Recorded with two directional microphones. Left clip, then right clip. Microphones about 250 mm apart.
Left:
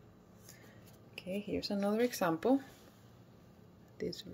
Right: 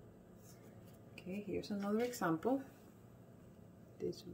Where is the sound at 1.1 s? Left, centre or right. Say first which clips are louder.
Left 5 dB; left.